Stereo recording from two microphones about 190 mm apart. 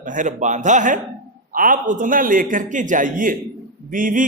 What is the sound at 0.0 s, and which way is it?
A man's voice, 45° right (ahead or behind).